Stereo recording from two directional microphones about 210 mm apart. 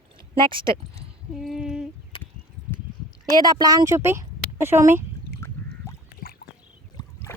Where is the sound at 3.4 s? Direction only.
20° right (ahead or behind).